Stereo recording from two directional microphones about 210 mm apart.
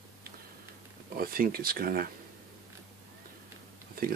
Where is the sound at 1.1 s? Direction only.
45° right (ahead or behind).